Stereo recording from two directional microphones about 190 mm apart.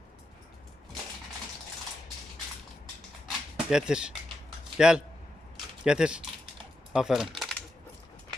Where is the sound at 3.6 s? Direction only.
5° right (ahead or behind).